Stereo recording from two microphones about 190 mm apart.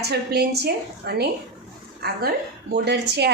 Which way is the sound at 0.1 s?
60° right (ahead or behind).